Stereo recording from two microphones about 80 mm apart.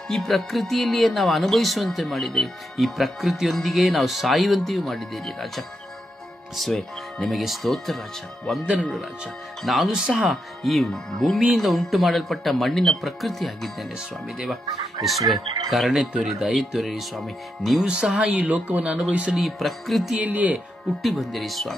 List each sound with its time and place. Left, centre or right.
0.1 s speech: centre
10.0 s speech: centre
10.3 s speech: centre
20.2 s speech: centre
21.0 s speech: centre